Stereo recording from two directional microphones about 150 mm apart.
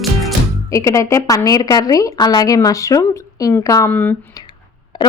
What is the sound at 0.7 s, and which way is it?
A woman's voice, 20° left (ahead or behind).